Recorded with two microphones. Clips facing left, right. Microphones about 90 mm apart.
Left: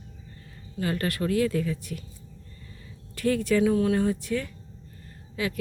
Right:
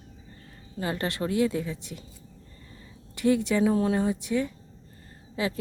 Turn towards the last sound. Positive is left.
turn(degrees=-25)  # may be behind; listen again after turning